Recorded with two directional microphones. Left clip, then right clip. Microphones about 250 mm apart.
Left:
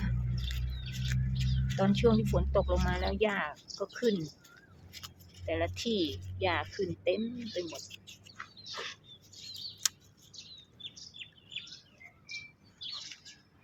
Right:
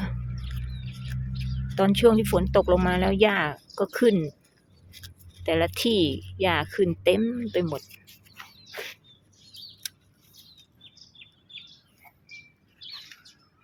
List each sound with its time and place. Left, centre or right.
0.4 s music: centre
1.7 s speech: right
5.5 s speech: right
8.4 s bird: right
9.8 s a sound: centre